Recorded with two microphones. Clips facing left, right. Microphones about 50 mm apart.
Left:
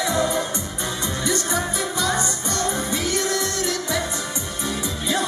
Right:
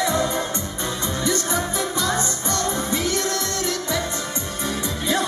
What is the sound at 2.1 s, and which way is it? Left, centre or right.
Music, centre.